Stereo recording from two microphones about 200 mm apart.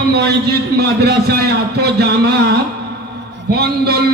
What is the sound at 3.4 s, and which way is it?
Speech, 50° right (ahead or behind).